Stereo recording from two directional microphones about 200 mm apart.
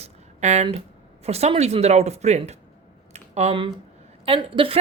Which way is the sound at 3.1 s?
30° right (ahead or behind).